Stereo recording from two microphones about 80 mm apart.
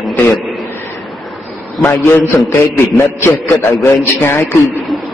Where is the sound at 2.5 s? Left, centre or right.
Left.